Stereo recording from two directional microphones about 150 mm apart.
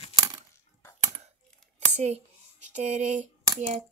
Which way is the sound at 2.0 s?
50° right (ahead or behind).